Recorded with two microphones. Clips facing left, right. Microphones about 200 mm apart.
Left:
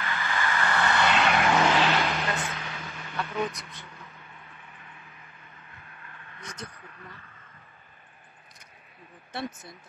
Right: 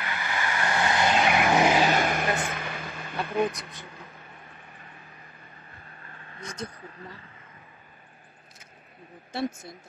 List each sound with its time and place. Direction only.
0.0 s vehicle: 15° right (ahead or behind)
1.9 s vehicle: 50° right (ahead or behind)
6.6 s speech: 25° right (ahead or behind)